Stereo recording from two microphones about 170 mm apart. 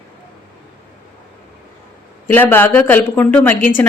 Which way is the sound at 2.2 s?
10° left (ahead or behind).